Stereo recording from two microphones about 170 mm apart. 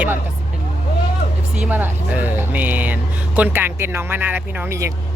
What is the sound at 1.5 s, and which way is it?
Speech, 10° right (ahead or behind).